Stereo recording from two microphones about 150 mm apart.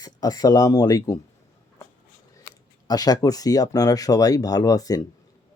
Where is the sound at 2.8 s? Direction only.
25° left (ahead or behind).